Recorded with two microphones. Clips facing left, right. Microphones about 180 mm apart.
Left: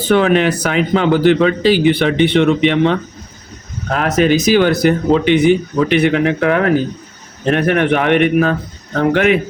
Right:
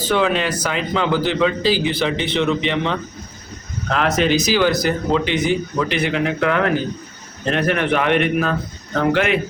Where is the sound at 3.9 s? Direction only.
45° left (ahead or behind).